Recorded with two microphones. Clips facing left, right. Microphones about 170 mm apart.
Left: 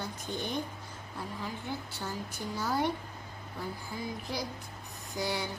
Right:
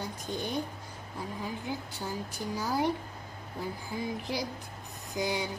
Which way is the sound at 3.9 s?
15° right (ahead or behind).